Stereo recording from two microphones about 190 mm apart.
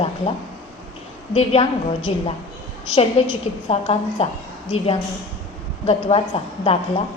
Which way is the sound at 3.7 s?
30° left (ahead or behind).